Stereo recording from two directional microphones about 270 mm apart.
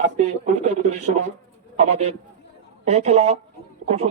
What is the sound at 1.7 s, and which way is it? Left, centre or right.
A man's voice, right.